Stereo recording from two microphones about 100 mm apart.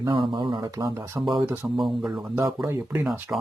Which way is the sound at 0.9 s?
25° right (ahead or behind).